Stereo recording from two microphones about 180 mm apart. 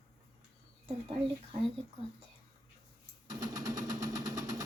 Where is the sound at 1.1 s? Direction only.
30° right (ahead or behind).